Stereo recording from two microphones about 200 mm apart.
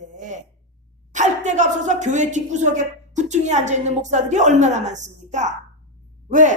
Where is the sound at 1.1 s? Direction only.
35° right (ahead or behind).